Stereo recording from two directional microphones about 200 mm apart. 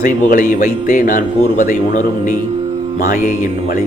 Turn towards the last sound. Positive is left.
turn(degrees=40)  # may be behind; listen again after turning